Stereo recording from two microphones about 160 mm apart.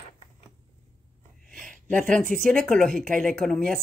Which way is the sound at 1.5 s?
55° right (ahead or behind).